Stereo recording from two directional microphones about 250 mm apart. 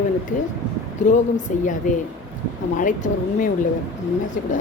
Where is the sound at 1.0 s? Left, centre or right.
Left.